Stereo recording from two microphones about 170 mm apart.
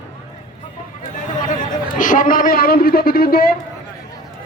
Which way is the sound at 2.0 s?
50° left (ahead or behind).